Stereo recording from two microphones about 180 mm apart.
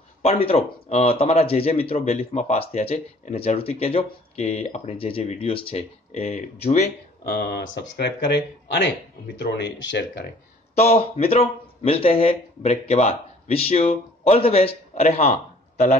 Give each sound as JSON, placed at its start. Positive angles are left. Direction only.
{"t": 0.2, "sound": "speech", "side_deg": 30}
{"t": 7.2, "sound": "speech", "side_deg": 60}
{"t": 10.8, "sound": "speech", "side_deg": 35}